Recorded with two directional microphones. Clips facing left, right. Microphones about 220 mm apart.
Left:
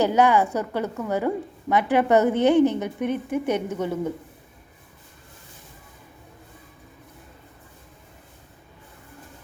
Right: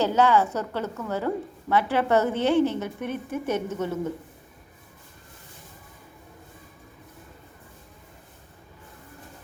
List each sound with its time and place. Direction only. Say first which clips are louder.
0.0 s a woman's voice: left 2 dB; 15° left (ahead or behind)